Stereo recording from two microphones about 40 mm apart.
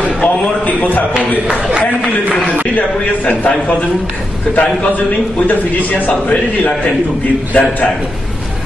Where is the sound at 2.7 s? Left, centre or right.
Left.